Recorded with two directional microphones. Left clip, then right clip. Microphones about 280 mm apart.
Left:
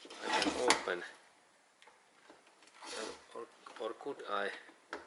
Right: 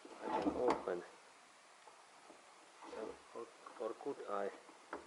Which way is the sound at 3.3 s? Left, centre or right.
Right.